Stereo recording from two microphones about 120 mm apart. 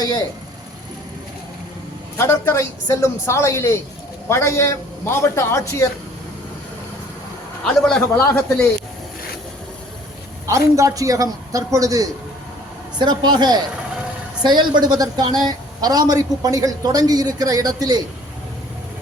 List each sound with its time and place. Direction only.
0.0 s speech: 35° left (ahead or behind)
2.1 s a man's voice: 20° left (ahead or behind)
7.6 s a man's voice: 5° left (ahead or behind)
10.4 s a man's voice: 25° right (ahead or behind)